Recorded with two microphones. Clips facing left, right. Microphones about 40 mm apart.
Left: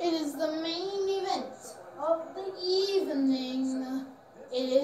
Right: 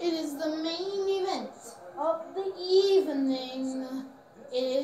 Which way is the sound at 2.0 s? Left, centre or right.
Right.